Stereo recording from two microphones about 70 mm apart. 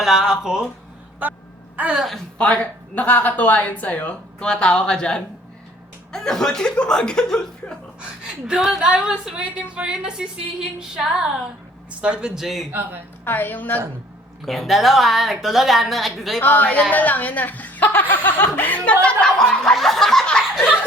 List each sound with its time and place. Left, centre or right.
0.0 s a woman's voice: centre
1.7 s speech: right
2.4 s speech: centre
8.0 s a woman's voice: centre
13.2 s speech: left
14.4 s a woman's voice: centre
16.4 s speech: left
19.2 s a woman's voice: centre